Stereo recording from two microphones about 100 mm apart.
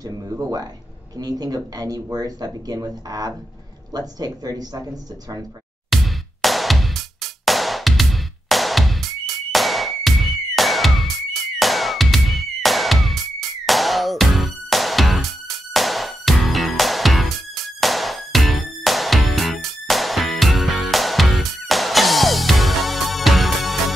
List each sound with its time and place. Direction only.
0.1 s speech: 35° right (ahead or behind)
5.9 s music: centre (ahead or behind)